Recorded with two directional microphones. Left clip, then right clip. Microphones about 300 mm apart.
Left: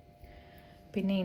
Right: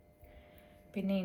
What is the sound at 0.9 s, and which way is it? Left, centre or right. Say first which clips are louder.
Speech: left 3 dB; left.